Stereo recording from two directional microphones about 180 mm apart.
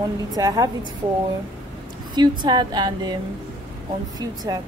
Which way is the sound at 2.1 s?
25° right (ahead or behind).